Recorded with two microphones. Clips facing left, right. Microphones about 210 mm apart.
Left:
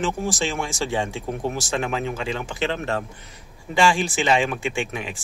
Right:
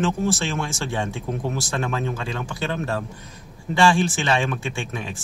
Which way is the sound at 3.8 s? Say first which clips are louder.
Right 1 dB; 15° left (ahead or behind).